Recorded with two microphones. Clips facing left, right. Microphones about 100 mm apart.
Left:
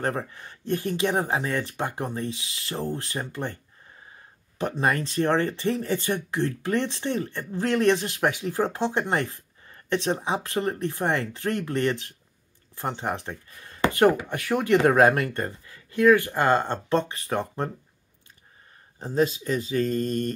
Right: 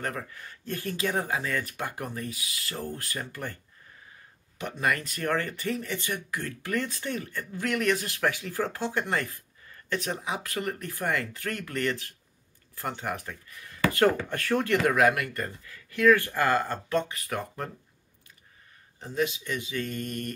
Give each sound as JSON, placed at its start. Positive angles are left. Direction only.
{"t": 0.0, "sound": "speech", "side_deg": 30}
{"t": 4.6, "sound": "speech", "side_deg": 35}
{"t": 14.8, "sound": "speech", "side_deg": 30}
{"t": 18.9, "sound": "speech", "side_deg": 35}